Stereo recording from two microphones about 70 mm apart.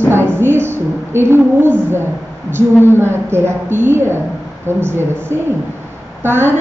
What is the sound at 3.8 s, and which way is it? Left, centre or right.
A woman's voice, right.